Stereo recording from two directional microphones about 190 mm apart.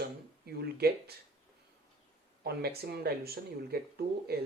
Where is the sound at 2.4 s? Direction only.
55° right (ahead or behind).